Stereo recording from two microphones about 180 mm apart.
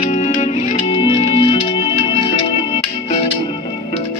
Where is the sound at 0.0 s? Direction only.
35° left (ahead or behind).